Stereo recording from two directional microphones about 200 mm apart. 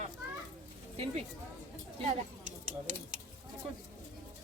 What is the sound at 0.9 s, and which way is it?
Speech, 30° right (ahead or behind).